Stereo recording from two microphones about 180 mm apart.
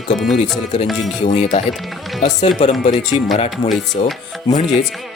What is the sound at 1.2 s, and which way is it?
Speech, 40° left (ahead or behind).